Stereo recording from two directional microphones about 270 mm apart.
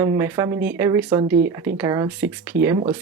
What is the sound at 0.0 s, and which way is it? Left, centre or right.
Speech, centre.